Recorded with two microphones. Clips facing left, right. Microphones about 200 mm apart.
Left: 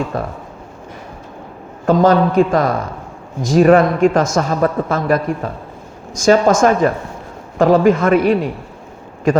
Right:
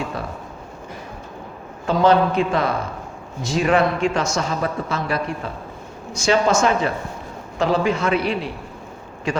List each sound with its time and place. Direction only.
0.1 s a man's voice: 50° left (ahead or behind)
1.9 s a man's voice: 45° left (ahead or behind)